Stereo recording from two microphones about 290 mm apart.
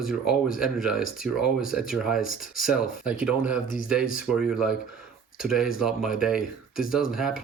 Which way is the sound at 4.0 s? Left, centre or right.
Left.